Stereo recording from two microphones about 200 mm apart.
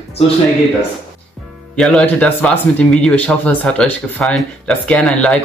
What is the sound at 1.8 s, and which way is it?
Speech, centre (ahead or behind).